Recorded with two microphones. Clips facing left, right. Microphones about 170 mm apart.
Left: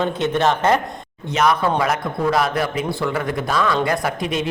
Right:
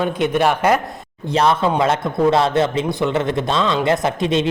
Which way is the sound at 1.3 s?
30° right (ahead or behind).